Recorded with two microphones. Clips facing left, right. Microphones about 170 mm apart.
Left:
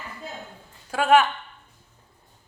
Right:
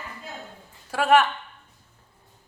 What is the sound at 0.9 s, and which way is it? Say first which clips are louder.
Speech: left 1 dB; centre (ahead or behind).